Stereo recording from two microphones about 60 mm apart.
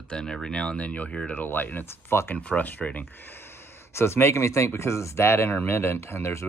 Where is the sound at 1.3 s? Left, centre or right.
Left.